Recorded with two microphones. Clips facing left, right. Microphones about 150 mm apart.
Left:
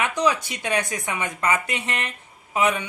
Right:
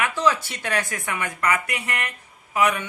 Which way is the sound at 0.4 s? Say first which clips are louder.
Left 1 dB; 15° left (ahead or behind).